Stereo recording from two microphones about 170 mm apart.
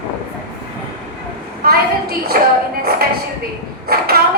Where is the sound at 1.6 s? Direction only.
60° right (ahead or behind).